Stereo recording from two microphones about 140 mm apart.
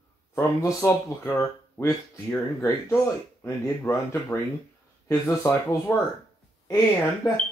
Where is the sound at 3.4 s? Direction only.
20° left (ahead or behind).